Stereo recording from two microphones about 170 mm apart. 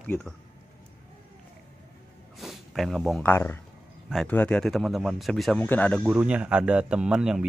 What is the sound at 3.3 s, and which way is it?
Speech, 15° left (ahead or behind).